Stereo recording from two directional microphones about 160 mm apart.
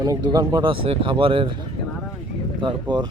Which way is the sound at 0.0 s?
25° right (ahead or behind).